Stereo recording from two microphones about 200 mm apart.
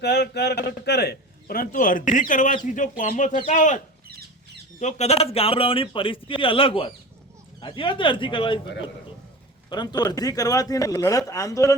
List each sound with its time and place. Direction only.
0.0 s a man's voice: 55° left (ahead or behind); by 3.8 s 40° left (ahead or behind)
4.8 s speech: 35° left (ahead or behind)
9.6 s speech: 20° left (ahead or behind)